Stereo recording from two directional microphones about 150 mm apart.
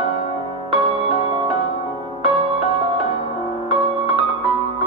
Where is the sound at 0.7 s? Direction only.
40° right (ahead or behind).